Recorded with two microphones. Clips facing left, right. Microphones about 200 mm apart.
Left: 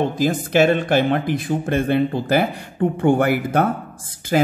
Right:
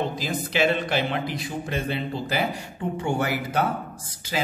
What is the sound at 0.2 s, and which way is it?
Speech, 50° left (ahead or behind).